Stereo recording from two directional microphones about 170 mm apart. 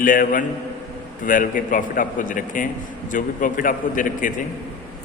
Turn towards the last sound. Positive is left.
turn(degrees=50)  # may be behind; listen again after turning